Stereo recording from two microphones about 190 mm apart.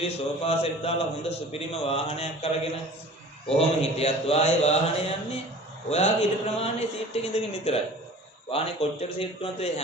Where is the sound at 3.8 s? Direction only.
30° left (ahead or behind).